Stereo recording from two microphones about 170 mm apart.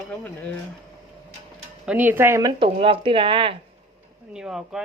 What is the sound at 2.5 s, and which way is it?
Speech, 30° right (ahead or behind).